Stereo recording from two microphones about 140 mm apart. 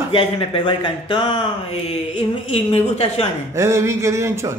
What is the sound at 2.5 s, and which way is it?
Speech, 45° left (ahead or behind).